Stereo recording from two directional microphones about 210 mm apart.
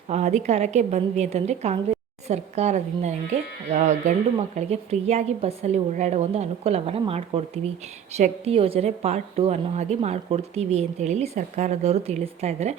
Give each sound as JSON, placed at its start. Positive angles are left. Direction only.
{"t": 0.1, "sound": "a woman's voice", "side_deg": -35}